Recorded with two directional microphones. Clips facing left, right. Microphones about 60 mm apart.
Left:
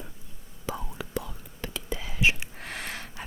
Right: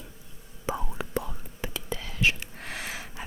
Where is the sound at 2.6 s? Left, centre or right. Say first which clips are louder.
Even; centre.